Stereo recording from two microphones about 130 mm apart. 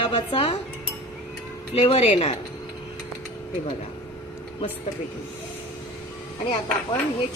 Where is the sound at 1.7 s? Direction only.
50° left (ahead or behind).